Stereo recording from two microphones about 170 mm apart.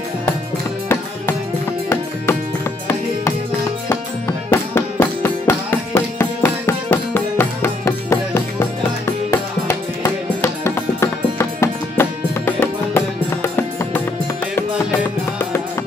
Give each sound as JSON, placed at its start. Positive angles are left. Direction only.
{"t": 3.9, "sound": "music", "side_deg": 10}